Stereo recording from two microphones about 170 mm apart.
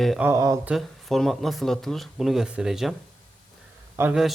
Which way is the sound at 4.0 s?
5° right (ahead or behind).